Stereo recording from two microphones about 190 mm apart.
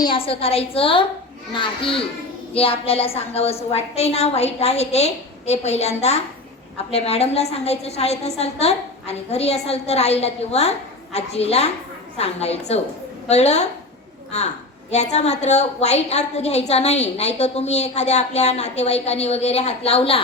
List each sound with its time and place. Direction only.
0.0 s a woman's voice: 25° left (ahead or behind)